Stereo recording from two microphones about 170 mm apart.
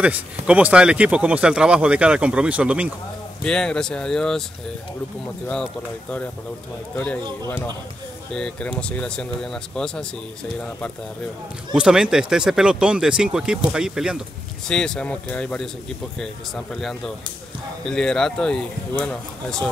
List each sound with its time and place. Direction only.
0.0 s speech: 10° right (ahead or behind)
3.4 s speech: 5° left (ahead or behind)
5.5 s speech: 5° left (ahead or behind)
7.4 s speech: 15° left (ahead or behind)
11.7 s speech: 5° right (ahead or behind)